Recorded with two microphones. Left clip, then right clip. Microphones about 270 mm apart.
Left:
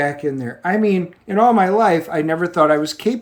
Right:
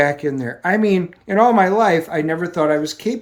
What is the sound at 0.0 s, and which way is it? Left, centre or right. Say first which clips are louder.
Speech: right 3 dB; centre.